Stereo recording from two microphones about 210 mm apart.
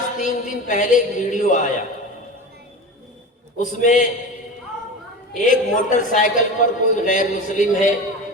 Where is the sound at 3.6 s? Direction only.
35° left (ahead or behind).